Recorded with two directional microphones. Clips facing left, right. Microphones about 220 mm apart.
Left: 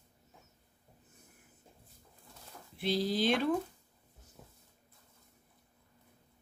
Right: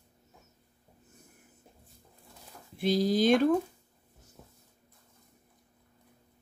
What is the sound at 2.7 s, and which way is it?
Speech, 45° right (ahead or behind).